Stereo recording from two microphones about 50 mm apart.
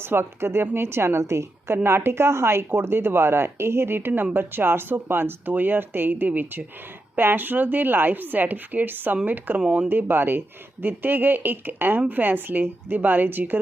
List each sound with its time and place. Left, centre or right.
0.0 s a woman's voice: right